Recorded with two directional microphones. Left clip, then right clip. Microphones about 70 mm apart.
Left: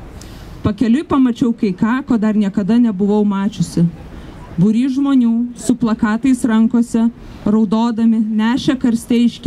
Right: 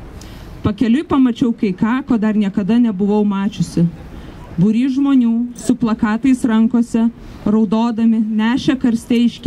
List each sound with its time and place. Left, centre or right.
0.6 s speech: left